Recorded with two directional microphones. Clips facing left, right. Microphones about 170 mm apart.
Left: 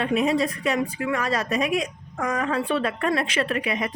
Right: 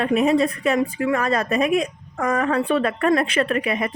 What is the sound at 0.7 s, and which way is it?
A woman's voice, 40° right (ahead or behind).